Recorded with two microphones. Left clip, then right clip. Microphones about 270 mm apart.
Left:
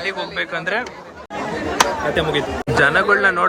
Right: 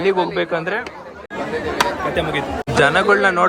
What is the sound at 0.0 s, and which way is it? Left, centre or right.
Speech, centre.